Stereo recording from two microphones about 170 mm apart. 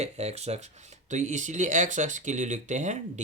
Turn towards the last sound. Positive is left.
turn(degrees=-45)  # may be behind; listen again after turning